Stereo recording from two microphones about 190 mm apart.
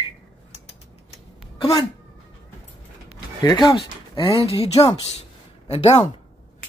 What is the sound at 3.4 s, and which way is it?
Speech, 20° left (ahead or behind).